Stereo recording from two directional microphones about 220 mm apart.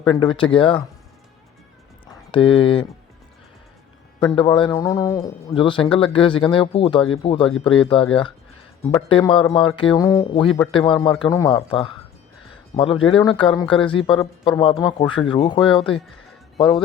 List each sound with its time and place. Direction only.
0.0 s speech: 20° left (ahead or behind)
2.3 s speech: 25° left (ahead or behind)
4.2 s speech: 20° left (ahead or behind)
15.5 s speech: centre (ahead or behind)
16.0 s music: centre (ahead or behind)